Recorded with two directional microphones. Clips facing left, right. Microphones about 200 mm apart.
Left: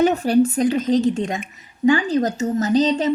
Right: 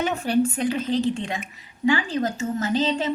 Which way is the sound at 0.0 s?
40° left (ahead or behind).